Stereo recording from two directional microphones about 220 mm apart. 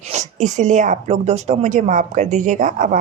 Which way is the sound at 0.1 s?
30° right (ahead or behind).